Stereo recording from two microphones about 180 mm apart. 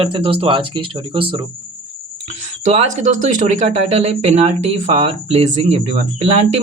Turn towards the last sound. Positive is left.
turn(degrees=-40)  # may be behind; listen again after turning